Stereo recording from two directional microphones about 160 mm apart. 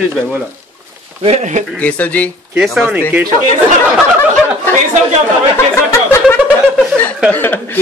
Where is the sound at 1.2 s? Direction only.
45° right (ahead or behind).